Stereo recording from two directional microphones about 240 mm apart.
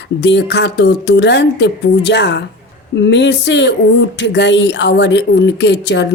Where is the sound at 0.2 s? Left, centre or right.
Left.